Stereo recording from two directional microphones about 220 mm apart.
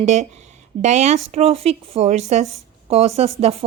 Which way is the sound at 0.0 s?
30° right (ahead or behind).